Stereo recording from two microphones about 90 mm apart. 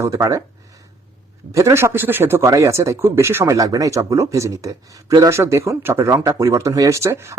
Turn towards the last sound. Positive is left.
turn(degrees=-30)  # may be behind; listen again after turning